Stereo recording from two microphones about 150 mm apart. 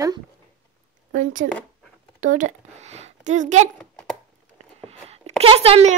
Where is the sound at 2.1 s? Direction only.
55° right (ahead or behind).